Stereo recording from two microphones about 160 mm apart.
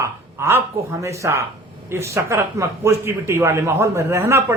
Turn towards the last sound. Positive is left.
turn(degrees=-15)  # may be behind; listen again after turning